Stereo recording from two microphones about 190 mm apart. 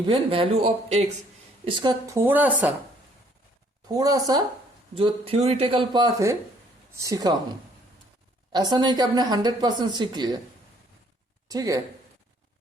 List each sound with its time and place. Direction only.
0.0 s a woman's voice: 25° right (ahead or behind); by 2.5 s 10° right (ahead or behind)
3.8 s a woman's voice: 20° right (ahead or behind)
8.5 s a woman's voice: 25° right (ahead or behind)
11.4 s speech: 20° right (ahead or behind)